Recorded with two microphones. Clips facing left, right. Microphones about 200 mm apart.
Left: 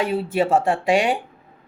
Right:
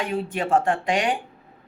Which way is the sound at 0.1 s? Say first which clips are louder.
Left 3 dB; 5° left (ahead or behind).